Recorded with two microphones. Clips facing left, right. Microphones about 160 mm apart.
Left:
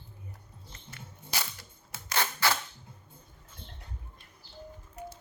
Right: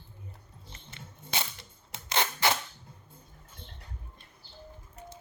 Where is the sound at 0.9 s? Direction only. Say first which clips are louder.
Right 1 dB; 25° right (ahead or behind).